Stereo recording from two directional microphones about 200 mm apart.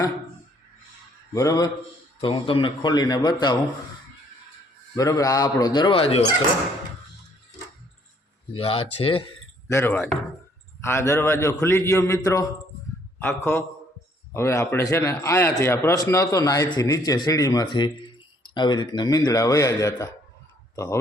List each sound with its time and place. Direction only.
1.3 s a man's voice: 15° left (ahead or behind)
4.9 s speech: 15° left (ahead or behind)
8.5 s speech: 25° left (ahead or behind)
9.6 s a man's voice: 10° left (ahead or behind)